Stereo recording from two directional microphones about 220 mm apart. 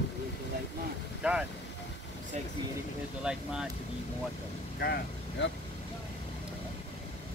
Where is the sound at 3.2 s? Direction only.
5° right (ahead or behind).